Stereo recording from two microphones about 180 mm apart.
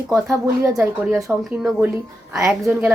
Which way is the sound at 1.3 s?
5° right (ahead or behind).